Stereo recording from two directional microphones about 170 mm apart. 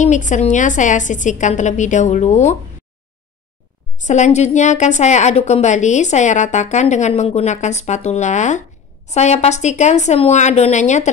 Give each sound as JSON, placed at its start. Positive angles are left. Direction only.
{"t": 0.0, "sound": "a woman's voice", "side_deg": 45}
{"t": 4.0, "sound": "a woman's voice", "side_deg": 45}